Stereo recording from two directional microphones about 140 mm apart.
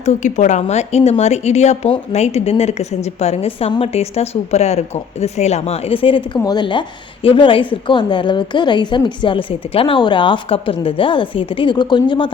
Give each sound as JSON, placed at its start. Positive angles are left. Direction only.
{"t": 0.0, "sound": "a woman's voice", "side_deg": 60}